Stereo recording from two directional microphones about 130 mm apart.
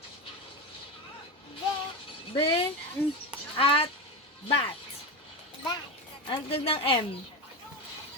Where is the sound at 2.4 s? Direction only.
45° left (ahead or behind).